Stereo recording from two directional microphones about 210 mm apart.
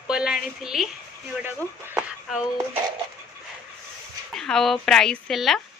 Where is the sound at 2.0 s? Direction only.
5° right (ahead or behind).